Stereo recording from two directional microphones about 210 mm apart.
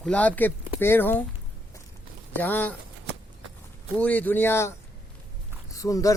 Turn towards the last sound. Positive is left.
turn(degrees=15)  # may be behind; listen again after turning